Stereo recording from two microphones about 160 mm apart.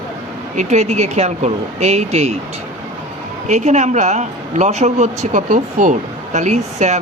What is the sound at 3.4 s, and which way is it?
A woman's voice, 45° right (ahead or behind).